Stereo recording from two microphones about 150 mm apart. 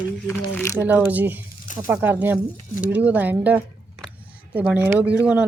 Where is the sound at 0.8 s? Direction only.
10° right (ahead or behind).